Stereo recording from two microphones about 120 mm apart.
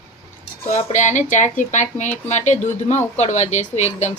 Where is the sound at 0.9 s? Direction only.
90° left; by 4.1 s 70° left (ahead or behind).